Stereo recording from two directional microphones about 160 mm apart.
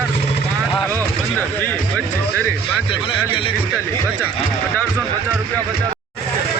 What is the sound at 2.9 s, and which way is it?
Speech, 35° left (ahead or behind).